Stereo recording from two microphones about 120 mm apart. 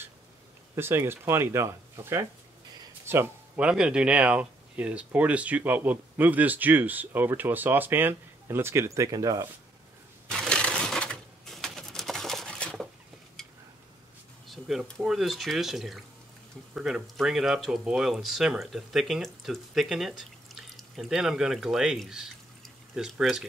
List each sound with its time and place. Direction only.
0.7 s speech: 20° right (ahead or behind)
3.6 s speech: 10° right (ahead or behind); by 9.4 s 30° right (ahead or behind)
10.2 s crushing: 5° left (ahead or behind)
14.5 s speech: 5° right (ahead or behind)